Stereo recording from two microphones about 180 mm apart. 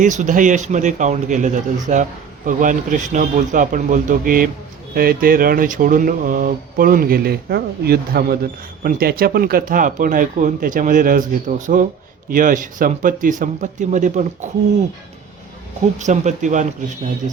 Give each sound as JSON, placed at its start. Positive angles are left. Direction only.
{"t": 0.0, "sound": "speech", "side_deg": -45}
{"t": 16.0, "sound": "speech", "side_deg": -40}